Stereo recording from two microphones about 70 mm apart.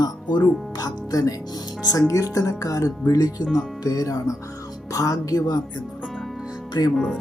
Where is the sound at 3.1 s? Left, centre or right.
Left.